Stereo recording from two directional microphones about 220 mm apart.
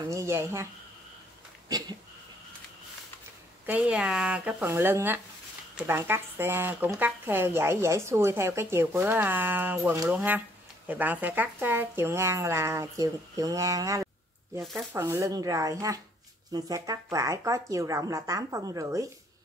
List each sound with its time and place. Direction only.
0.1 s speech: 10° right (ahead or behind)
1.7 s a sound: 15° right (ahead or behind)
3.6 s speech: 5° right (ahead or behind)
14.6 s speech: centre (ahead or behind)
15.0 s speech: 15° right (ahead or behind)